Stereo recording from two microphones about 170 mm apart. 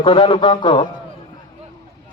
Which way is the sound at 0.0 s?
30° left (ahead or behind).